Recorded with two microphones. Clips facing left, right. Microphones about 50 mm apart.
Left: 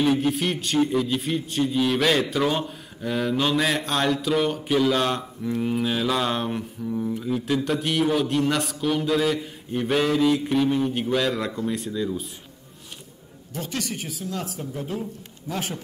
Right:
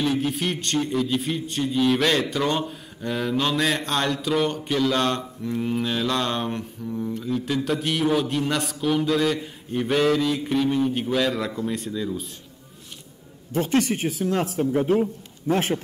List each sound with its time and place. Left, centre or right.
0.0 s a man's voice: centre
13.5 s speech: right